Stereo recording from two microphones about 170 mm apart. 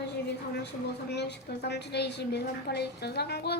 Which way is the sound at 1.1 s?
80° left.